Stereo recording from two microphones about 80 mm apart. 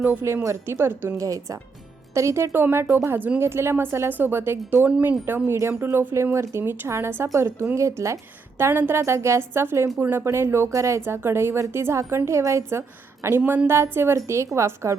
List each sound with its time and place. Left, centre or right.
0.0 s speech: right
0.4 s speech: right
1.2 s speech: right
4.9 s speech: centre
5.2 s speech: right